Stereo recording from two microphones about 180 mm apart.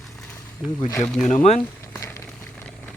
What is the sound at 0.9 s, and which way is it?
Speech, 10° left (ahead or behind).